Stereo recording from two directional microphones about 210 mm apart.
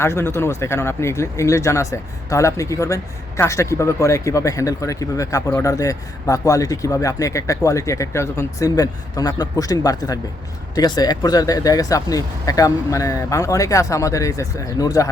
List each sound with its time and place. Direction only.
0.0 s speech: 10° left (ahead or behind)